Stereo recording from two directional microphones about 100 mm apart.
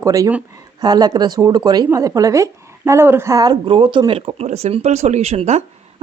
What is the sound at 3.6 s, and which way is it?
Speech, 60° right (ahead or behind).